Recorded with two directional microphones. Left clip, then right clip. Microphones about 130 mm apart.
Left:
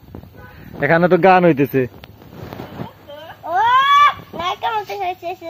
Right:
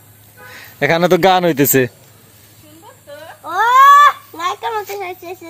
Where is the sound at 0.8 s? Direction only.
30° right (ahead or behind); by 1.9 s 60° right (ahead or behind).